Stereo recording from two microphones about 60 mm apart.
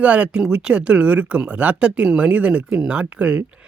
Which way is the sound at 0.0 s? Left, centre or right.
Right.